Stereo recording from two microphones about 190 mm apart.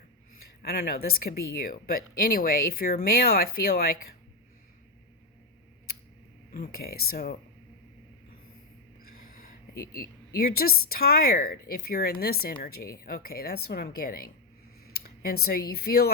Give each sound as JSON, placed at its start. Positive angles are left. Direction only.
{"t": 0.6, "sound": "speech", "side_deg": 50}
{"t": 6.5, "sound": "speech", "side_deg": 50}
{"t": 9.1, "sound": "a sound", "side_deg": 50}
{"t": 10.0, "sound": "speech", "side_deg": 50}